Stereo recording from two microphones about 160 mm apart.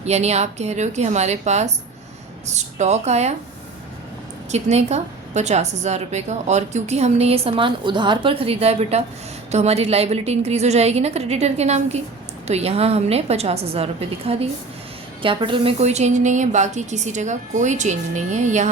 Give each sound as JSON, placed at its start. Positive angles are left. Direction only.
{"t": 0.0, "sound": "a woman's voice", "side_deg": -45}
{"t": 4.5, "sound": "a woman's voice", "side_deg": -45}